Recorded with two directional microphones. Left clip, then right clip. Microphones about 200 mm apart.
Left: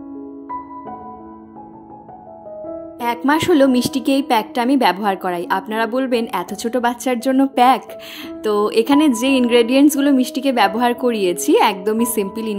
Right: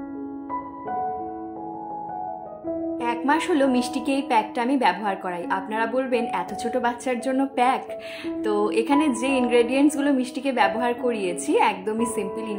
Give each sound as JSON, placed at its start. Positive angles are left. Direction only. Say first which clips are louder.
{"t": 3.0, "sound": "a woman's voice", "louder": "left 6 dB", "side_deg": 45}